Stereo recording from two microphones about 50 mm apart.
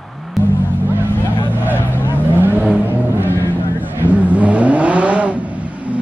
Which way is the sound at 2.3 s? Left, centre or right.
Right.